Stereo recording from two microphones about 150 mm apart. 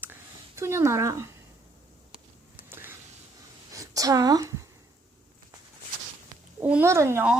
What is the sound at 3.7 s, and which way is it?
Speech, 25° right (ahead or behind).